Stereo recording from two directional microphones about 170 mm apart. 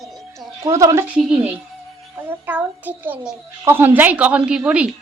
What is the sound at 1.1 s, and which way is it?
A child's voice, 5° right (ahead or behind).